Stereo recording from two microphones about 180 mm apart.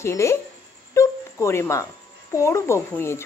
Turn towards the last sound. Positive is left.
turn(degrees=15)  # may be behind; listen again after turning